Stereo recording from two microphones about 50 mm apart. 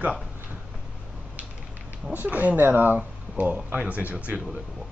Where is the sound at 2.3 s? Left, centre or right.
Right.